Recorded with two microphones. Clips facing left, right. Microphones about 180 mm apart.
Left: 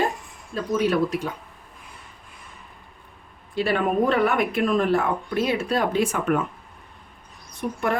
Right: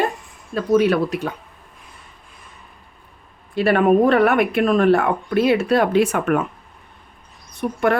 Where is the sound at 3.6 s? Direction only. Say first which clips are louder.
Right 7 dB; 60° right (ahead or behind).